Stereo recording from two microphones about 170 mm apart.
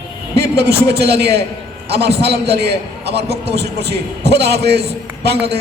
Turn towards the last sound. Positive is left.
turn(degrees=-75)  # may be behind; listen again after turning